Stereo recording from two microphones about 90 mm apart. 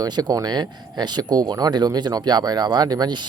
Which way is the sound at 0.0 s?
50° right (ahead or behind).